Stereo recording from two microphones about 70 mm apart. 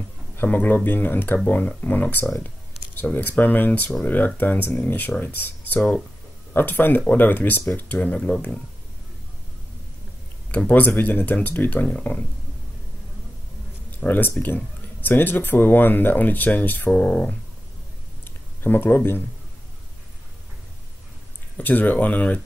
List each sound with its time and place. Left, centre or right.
0.4 s speech: left
10.5 s speech: left
13.9 s speech: left
17.0 s speech: centre
18.2 s a sound: left
21.5 s speech: left